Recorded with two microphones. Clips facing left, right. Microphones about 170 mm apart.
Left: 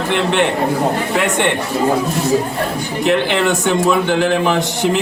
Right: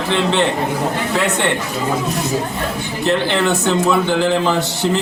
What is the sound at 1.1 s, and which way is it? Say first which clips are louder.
Speech: left 1 dB; 15° left (ahead or behind).